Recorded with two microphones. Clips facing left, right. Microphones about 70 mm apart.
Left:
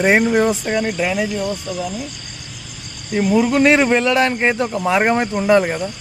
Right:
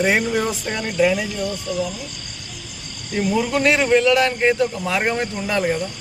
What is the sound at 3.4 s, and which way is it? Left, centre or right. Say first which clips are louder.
A man's voice: left 4 dB; left.